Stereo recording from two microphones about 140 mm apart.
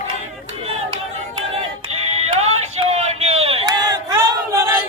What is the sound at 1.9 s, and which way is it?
Music, 50° right (ahead or behind).